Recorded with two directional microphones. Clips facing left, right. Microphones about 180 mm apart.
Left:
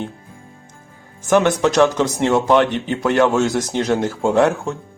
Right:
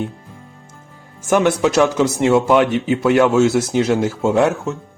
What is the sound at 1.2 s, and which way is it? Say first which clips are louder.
Speech: even; 10° right (ahead or behind).